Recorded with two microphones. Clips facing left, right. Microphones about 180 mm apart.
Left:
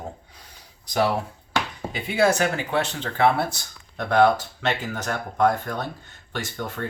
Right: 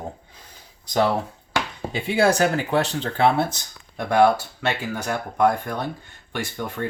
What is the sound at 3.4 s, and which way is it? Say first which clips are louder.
Speech: right 3 dB; 20° right (ahead or behind).